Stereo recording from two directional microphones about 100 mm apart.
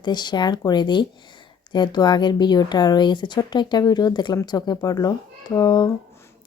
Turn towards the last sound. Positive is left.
turn(degrees=40)  # may be behind; listen again after turning